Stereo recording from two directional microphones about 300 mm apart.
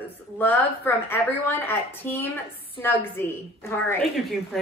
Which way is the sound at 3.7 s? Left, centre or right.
Centre.